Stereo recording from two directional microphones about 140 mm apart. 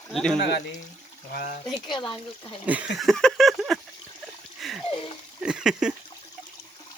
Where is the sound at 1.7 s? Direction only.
30° left (ahead or behind).